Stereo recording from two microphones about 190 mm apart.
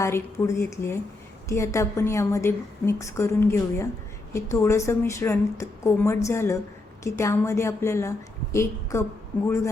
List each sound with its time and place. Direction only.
0.0 s a woman's voice: 15° left (ahead or behind)